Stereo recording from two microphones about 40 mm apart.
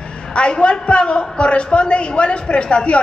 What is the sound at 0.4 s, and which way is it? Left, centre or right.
A man's voice, left.